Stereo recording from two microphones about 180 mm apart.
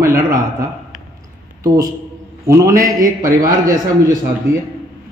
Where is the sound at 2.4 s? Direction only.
15° right (ahead or behind).